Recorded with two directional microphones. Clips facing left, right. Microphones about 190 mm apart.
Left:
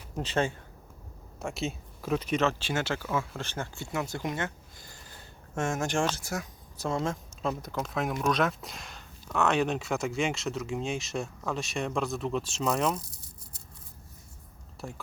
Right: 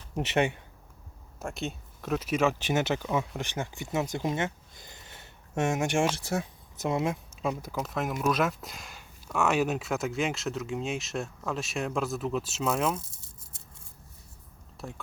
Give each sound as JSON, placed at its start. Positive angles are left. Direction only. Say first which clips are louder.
{"t": 0.3, "sound": "speech", "louder": "right 2 dB", "side_deg": -15}
{"t": 1.4, "sound": "speech", "louder": "left 1 dB", "side_deg": 0}
{"t": 6.1, "sound": "speech", "louder": "right 4 dB", "side_deg": -30}
{"t": 13.0, "sound": "a sound", "louder": "left 1 dB", "side_deg": -25}
{"t": 14.8, "sound": "speech", "louder": "even", "side_deg": 0}